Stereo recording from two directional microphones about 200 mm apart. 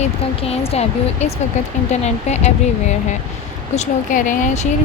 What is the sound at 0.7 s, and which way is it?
Speech, 30° left (ahead or behind).